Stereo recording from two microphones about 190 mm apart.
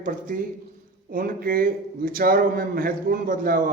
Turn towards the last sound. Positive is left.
turn(degrees=-50)  # may be behind; listen again after turning